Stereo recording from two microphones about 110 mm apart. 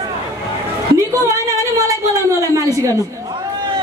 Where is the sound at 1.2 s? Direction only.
30° right (ahead or behind).